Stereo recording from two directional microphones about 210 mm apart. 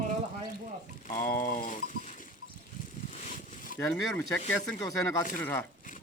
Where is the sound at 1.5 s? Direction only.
40° left (ahead or behind).